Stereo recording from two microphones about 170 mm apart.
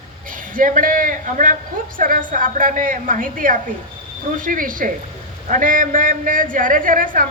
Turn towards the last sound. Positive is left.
turn(degrees=-55)  # may be behind; listen again after turning